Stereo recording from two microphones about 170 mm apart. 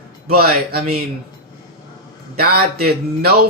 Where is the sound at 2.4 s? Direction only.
65° right (ahead or behind).